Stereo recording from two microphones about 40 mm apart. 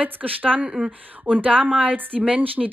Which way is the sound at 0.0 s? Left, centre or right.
Right.